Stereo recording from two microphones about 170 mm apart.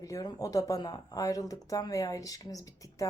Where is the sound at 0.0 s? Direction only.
20° left (ahead or behind).